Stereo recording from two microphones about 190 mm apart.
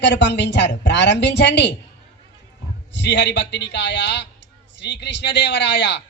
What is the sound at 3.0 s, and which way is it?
A man's voice, 65° left (ahead or behind).